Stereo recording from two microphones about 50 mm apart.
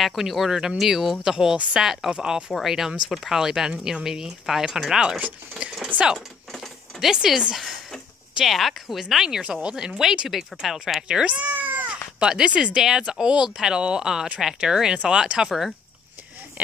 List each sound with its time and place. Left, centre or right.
0.0 s speech: centre
2.5 s speech: centre
6.1 s a sound: centre
7.0 s speech: centre
9.6 s speech: centre
11.1 s cat: right
12.2 s speech: centre